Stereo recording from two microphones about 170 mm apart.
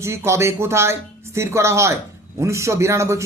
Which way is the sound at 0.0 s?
15° right (ahead or behind).